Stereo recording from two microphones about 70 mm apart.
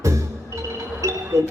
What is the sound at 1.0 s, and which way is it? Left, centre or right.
Music, right.